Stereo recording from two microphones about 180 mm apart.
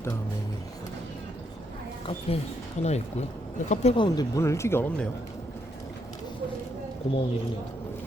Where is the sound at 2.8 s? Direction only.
40° left (ahead or behind); by 5.1 s 10° left (ahead or behind).